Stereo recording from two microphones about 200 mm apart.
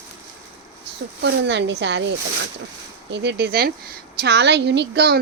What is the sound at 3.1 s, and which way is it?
A woman's voice, 60° right (ahead or behind).